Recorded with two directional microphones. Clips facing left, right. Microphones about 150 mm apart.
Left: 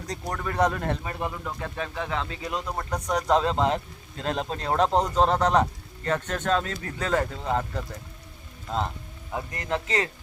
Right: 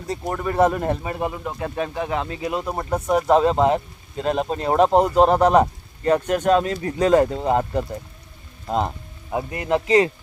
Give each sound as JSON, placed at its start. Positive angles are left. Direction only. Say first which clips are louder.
{"t": 0.1, "sound": "speech", "louder": "right 7 dB", "side_deg": -10}
{"t": 1.3, "sound": "speech", "louder": "right 5 dB", "side_deg": -20}
{"t": 2.5, "sound": "speech", "louder": "right 6 dB", "side_deg": -5}
{"t": 9.3, "sound": "speech", "louder": "right 7 dB", "side_deg": -15}